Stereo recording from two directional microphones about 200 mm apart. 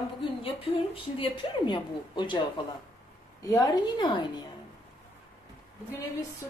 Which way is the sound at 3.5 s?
20° left (ahead or behind).